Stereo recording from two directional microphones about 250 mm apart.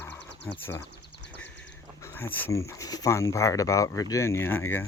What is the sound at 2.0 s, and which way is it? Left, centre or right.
Speech, centre.